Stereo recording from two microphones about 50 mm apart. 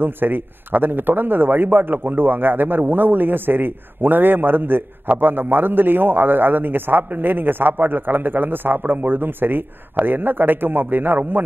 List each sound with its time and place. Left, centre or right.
0.0 s a man's voice: right